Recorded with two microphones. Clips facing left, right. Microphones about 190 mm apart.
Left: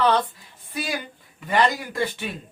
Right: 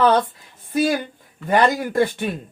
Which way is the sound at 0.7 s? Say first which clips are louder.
Right 10 dB; 45° right (ahead or behind).